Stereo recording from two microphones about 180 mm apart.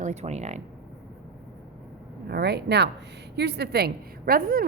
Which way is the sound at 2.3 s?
65° right (ahead or behind).